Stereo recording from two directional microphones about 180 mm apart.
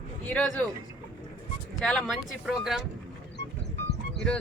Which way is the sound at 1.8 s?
Centre (ahead or behind).